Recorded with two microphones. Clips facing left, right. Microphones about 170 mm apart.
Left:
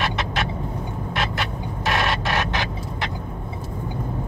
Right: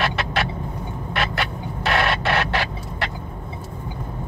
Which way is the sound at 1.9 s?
65° right (ahead or behind).